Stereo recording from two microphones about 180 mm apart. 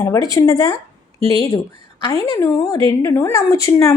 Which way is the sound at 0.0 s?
20° left (ahead or behind).